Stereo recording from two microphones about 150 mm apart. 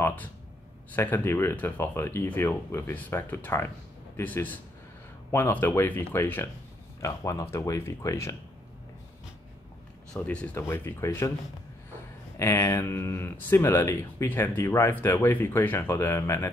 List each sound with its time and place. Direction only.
0.0 s speech: 10° left (ahead or behind)
10.1 s speech: 10° left (ahead or behind)
12.4 s speech: 20° left (ahead or behind)